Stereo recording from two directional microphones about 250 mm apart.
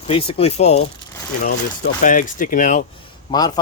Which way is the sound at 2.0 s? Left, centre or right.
Left.